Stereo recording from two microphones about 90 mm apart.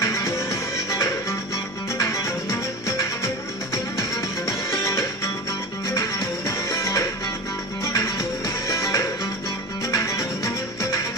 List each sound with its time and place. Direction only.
0.0 s music: 35° left (ahead or behind)